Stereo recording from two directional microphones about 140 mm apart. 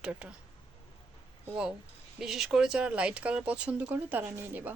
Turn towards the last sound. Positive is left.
turn(degrees=-15)  # may be behind; listen again after turning